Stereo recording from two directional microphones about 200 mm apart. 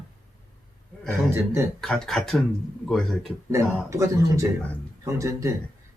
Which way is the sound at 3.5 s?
15° right (ahead or behind).